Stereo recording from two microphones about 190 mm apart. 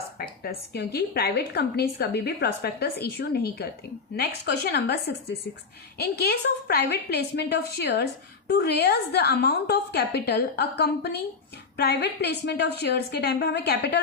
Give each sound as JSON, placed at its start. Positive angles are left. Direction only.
{"t": 0.7, "sound": "a woman's voice", "side_deg": 60}